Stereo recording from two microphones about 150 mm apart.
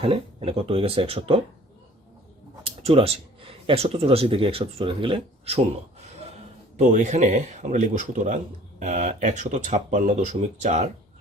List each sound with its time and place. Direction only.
0.0 s speech: 40° right (ahead or behind)
2.6 s speech: 40° right (ahead or behind)
6.8 s speech: 55° right (ahead or behind)